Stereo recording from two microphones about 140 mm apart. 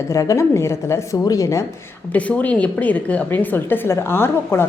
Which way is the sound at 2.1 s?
10° left (ahead or behind).